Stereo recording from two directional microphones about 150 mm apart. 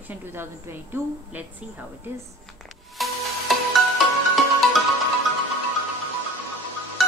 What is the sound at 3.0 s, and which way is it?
Music, centre (ahead or behind).